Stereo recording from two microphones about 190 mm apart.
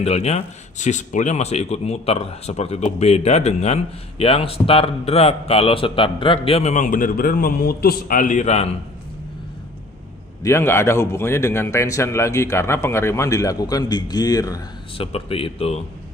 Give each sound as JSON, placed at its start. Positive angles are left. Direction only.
{"t": 0.0, "sound": "speech", "side_deg": 35}
{"t": 10.4, "sound": "a man's voice", "side_deg": 15}
{"t": 15.0, "sound": "speech", "side_deg": 30}